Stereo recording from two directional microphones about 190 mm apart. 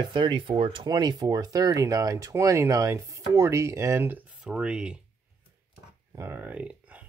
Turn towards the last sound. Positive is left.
turn(degrees=-5)  # may be behind; listen again after turning